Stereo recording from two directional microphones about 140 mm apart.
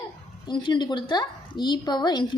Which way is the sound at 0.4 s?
35° left (ahead or behind).